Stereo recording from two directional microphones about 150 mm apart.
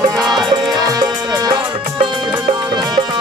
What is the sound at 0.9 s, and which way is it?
Music, 25° right (ahead or behind).